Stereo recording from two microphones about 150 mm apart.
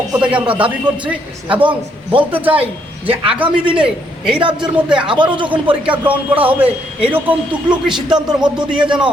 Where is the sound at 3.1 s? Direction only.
35° right (ahead or behind).